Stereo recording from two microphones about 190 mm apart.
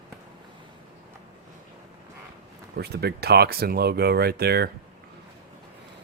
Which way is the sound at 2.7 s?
60° right (ahead or behind).